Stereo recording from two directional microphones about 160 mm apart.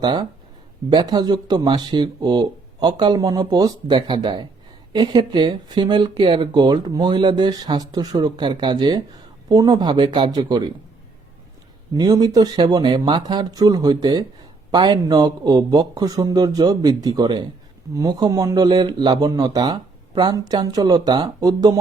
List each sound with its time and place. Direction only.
0.0 s speech: 25° right (ahead or behind)
11.9 s speech: 25° right (ahead or behind)